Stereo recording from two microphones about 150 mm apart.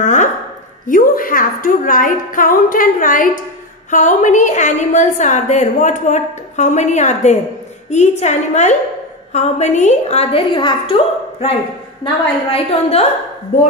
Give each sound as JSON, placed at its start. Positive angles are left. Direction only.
{"t": 0.0, "sound": "a sound", "side_deg": 55}
{"t": 0.8, "sound": "a woman's voice", "side_deg": 65}
{"t": 10.5, "sound": "a woman's voice", "side_deg": 30}
{"t": 12.0, "sound": "a woman's voice", "side_deg": 40}